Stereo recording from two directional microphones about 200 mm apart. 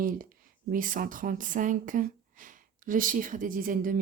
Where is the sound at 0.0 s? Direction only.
45° right (ahead or behind).